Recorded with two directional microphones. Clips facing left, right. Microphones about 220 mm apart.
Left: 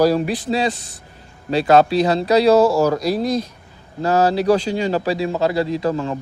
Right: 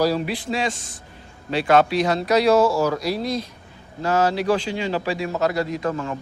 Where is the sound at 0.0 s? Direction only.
45° left (ahead or behind).